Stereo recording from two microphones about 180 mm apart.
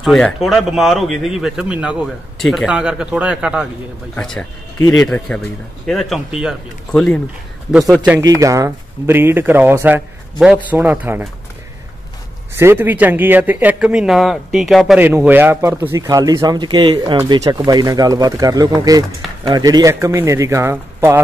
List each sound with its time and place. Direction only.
0.0 s speech: centre (ahead or behind)
8.2 s speech: 20° right (ahead or behind)
12.5 s speech: 10° right (ahead or behind)